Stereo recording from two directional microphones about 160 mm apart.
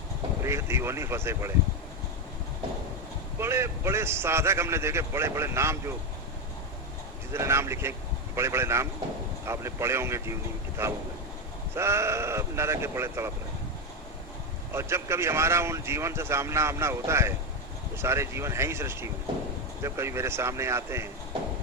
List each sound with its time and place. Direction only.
0.4 s speech: 15° right (ahead or behind)
3.4 s speech: 15° right (ahead or behind)
7.3 s speech: 15° right (ahead or behind)
14.7 s speech: 15° right (ahead or behind)